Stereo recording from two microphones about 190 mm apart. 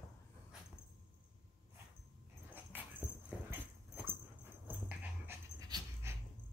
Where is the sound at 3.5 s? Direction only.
10° right (ahead or behind).